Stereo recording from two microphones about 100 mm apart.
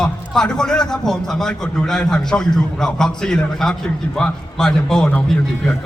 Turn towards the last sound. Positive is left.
turn(degrees=5)  # may be behind; listen again after turning